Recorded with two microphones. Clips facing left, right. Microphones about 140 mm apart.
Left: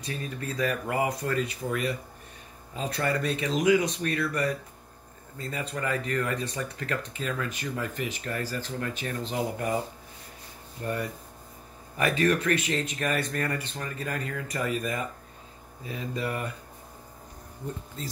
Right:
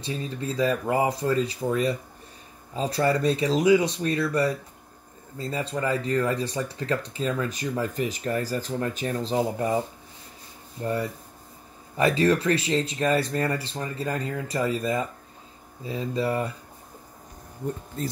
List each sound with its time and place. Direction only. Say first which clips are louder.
0.0 s speech: right 4 dB; 25° right (ahead or behind)